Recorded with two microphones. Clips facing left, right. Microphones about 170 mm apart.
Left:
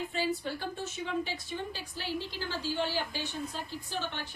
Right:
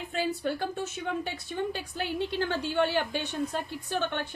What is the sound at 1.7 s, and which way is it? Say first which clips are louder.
A woman's voice: right 4 dB; 60° right (ahead or behind).